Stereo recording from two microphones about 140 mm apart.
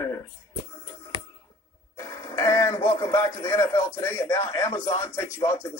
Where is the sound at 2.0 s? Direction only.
25° left (ahead or behind).